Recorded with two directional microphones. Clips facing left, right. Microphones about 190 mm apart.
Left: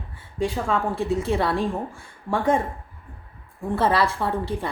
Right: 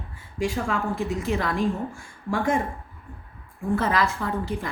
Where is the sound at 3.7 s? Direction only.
30° left (ahead or behind).